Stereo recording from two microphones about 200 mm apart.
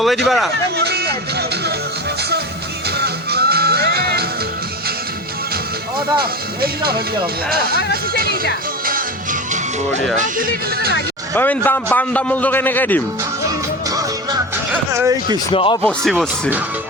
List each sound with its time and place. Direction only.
0.3 s speech: centre (ahead or behind)
0.8 s speech: 55° right (ahead or behind)
3.0 s music: 50° right (ahead or behind)
6.1 s speech: 50° right (ahead or behind)
8.9 s music: 45° right (ahead or behind)
11.3 s a man's voice: 10° left (ahead or behind)
14.8 s speech: 15° right (ahead or behind)
15.5 s speech: 25° left (ahead or behind)
15.8 s speech: 5° left (ahead or behind)